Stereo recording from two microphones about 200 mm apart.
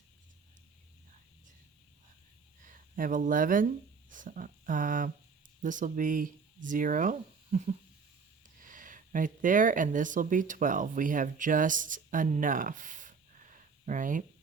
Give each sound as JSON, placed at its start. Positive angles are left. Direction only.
{"t": 2.6, "sound": "speech", "side_deg": -40}
{"t": 8.6, "sound": "speech", "side_deg": -40}